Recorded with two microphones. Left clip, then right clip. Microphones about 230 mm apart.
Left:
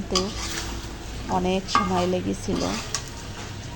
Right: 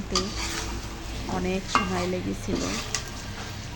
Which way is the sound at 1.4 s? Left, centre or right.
Centre.